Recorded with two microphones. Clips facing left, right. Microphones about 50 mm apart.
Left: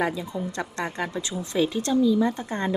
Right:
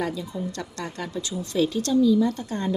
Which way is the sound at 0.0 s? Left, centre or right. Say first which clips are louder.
Left 2 dB; left.